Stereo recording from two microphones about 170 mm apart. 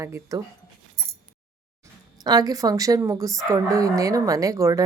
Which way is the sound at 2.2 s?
20° right (ahead or behind).